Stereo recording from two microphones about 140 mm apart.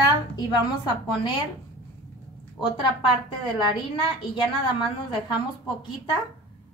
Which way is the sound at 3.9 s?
35° left (ahead or behind).